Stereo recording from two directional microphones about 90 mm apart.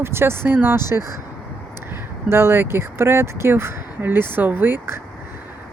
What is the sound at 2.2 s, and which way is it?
Speech, 25° right (ahead or behind).